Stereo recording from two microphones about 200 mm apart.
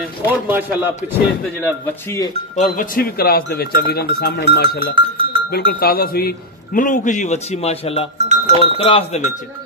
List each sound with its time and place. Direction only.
0.5 s a man's voice: 10° right (ahead or behind)
1.6 s speech: 15° left (ahead or behind)
2.5 s speech: 40° left (ahead or behind)
4.9 s cowbell: 25° right (ahead or behind)
5.5 s a man's voice: 50° left (ahead or behind); by 8.1 s 30° left (ahead or behind)
8.3 s cowbell: 30° right (ahead or behind)
8.7 s a man's voice: 30° left (ahead or behind)